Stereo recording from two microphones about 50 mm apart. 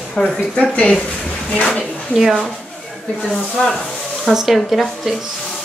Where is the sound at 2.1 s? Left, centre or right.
Centre.